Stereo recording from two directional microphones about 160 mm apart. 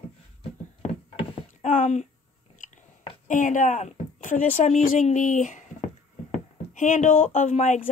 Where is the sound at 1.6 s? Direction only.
50° left (ahead or behind).